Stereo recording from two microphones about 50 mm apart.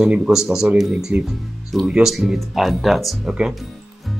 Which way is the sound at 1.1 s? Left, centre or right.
Right.